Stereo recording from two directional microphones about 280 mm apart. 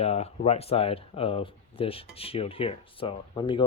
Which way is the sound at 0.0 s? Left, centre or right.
Left.